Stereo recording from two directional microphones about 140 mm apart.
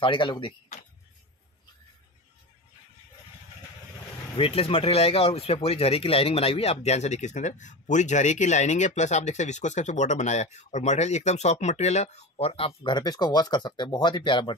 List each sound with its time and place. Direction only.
0.0 s speech: 35° left (ahead or behind)
4.4 s speech: 45° left (ahead or behind)